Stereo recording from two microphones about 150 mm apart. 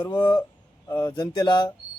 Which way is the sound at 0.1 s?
30° left (ahead or behind).